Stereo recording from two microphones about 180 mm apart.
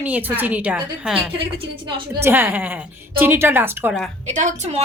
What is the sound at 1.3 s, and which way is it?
Speech, 30° right (ahead or behind).